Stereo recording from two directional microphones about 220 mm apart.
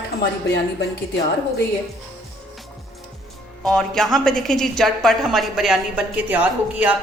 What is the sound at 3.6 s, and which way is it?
A woman's voice, centre (ahead or behind).